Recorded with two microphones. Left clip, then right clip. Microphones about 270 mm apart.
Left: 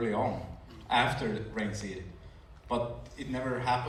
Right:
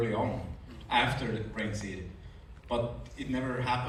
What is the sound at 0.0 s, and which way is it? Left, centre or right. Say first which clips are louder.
A man's voice: left 1 dB; left.